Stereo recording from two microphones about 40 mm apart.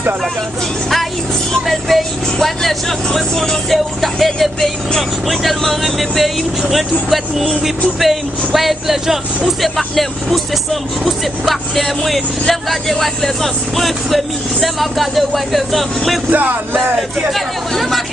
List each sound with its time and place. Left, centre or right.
1.5 s speech: centre
3.7 s speech: centre
8.5 s speech: centre
9.6 s speech: centre
16.3 s music: right
17.3 s speech: centre